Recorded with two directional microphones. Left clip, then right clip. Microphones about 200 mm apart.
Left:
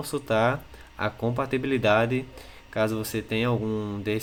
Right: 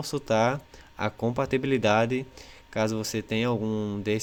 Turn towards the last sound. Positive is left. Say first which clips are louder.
# even
turn(degrees=-45)  # may be behind; listen again after turning